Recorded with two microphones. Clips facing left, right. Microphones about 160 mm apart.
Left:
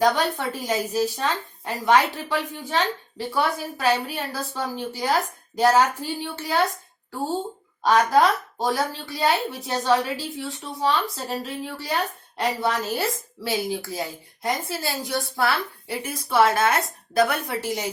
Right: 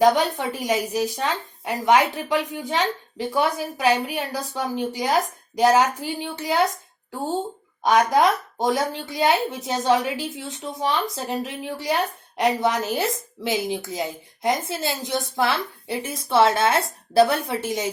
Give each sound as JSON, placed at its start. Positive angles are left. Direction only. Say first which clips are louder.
{"t": 0.0, "sound": "speech", "louder": "right 3 dB", "side_deg": -20}
{"t": 7.9, "sound": "a woman's voice", "louder": "even", "side_deg": -15}